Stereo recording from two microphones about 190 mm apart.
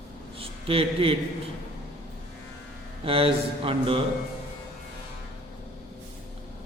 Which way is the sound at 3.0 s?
30° right (ahead or behind).